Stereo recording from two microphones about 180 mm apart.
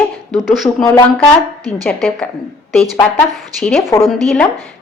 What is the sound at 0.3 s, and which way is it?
A woman's voice, centre (ahead or behind).